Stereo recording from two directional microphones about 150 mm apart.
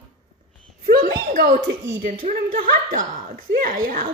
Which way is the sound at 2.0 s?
65° right (ahead or behind).